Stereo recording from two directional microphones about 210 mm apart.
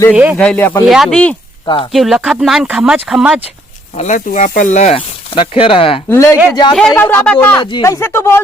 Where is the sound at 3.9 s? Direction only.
35° left (ahead or behind).